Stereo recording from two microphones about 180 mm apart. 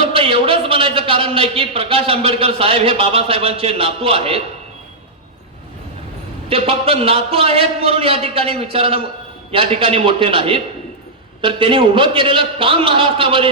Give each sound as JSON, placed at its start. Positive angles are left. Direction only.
{"t": 0.1, "sound": "a man's voice", "side_deg": -30}
{"t": 6.5, "sound": "a man's voice", "side_deg": -35}